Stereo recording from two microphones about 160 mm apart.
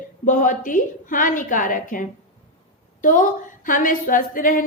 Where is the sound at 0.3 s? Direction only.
55° left (ahead or behind).